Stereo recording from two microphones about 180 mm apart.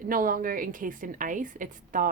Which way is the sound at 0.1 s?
50° right (ahead or behind).